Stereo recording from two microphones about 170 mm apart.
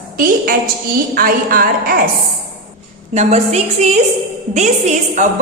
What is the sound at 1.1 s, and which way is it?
Speech, 60° right (ahead or behind).